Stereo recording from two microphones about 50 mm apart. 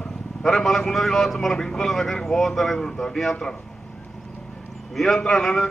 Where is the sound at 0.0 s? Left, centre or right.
Centre.